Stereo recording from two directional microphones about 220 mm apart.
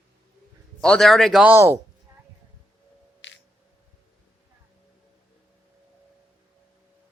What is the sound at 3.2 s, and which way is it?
Music, 55° left (ahead or behind).